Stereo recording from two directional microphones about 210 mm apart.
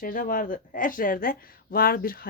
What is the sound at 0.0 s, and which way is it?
Speech, 40° left (ahead or behind).